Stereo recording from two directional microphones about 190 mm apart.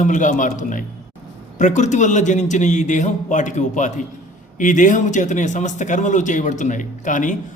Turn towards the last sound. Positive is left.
turn(degrees=40)  # may be behind; listen again after turning